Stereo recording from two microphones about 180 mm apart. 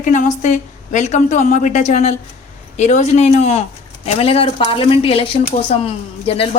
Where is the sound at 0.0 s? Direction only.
40° left (ahead or behind).